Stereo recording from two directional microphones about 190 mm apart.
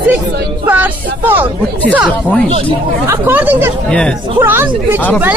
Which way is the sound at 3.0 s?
10° right (ahead or behind).